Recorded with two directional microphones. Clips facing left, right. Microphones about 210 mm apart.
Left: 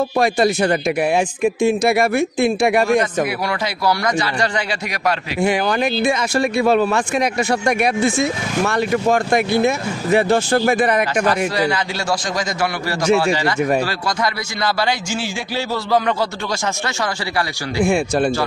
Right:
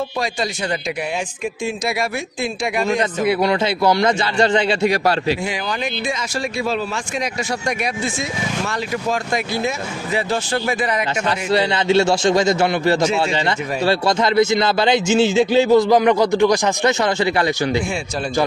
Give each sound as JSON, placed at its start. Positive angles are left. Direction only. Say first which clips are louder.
{"t": 0.2, "sound": "speech", "louder": "left 11 dB", "side_deg": 55}
{"t": 3.3, "sound": "a man's voice", "louder": "right 5 dB", "side_deg": -25}
{"t": 5.4, "sound": "speech", "louder": "left 6 dB", "side_deg": 55}
{"t": 11.2, "sound": "a man's voice", "louder": "left 1 dB", "side_deg": -25}